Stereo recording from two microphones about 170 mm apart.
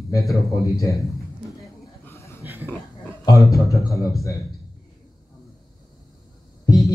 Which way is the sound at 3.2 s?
20° left (ahead or behind).